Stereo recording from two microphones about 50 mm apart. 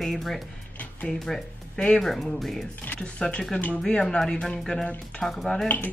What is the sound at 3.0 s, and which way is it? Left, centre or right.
Speech, centre.